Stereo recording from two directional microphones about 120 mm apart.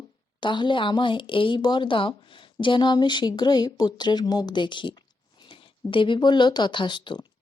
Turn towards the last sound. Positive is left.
turn(degrees=40)  # may be behind; listen again after turning